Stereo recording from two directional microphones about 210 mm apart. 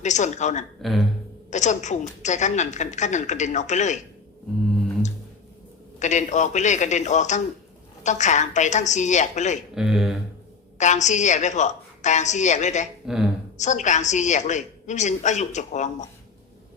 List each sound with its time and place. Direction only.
0.0 s a woman's voice: 35° left (ahead or behind)
0.8 s speech: centre (ahead or behind)
1.5 s a woman's voice: 35° left (ahead or behind)
6.0 s a woman's voice: 35° left (ahead or behind)
9.7 s speech: centre (ahead or behind)
10.8 s a woman's voice: 35° left (ahead or behind)